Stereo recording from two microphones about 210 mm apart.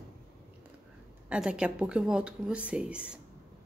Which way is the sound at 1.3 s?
5° right (ahead or behind).